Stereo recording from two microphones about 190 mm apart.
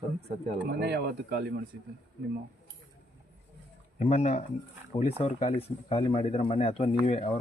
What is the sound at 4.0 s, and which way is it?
Speech, 35° left (ahead or behind).